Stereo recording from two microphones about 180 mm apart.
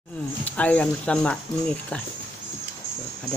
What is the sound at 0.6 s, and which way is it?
Speech, 5° left (ahead or behind).